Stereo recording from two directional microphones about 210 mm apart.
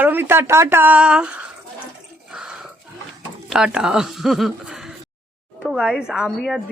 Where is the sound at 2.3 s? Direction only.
5° right (ahead or behind).